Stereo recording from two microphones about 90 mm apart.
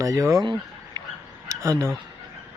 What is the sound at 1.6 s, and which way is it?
Speech, 30° right (ahead or behind).